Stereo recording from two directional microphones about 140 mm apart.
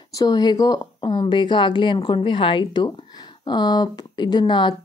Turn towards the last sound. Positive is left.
turn(degrees=30)  # may be behind; listen again after turning